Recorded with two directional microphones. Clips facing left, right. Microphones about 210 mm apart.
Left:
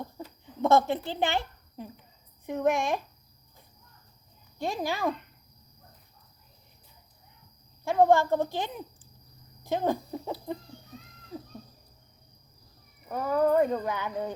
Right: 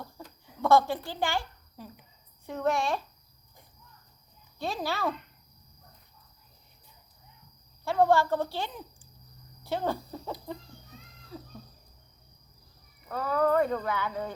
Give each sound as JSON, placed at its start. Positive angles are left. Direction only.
{"t": 0.6, "sound": "a woman's voice", "side_deg": 20}
{"t": 4.5, "sound": "speech", "side_deg": 15}
{"t": 7.9, "sound": "speech", "side_deg": 15}
{"t": 13.1, "sound": "speech", "side_deg": 15}